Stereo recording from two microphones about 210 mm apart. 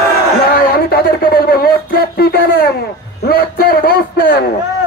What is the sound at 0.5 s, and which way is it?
A man's voice, 45° left (ahead or behind).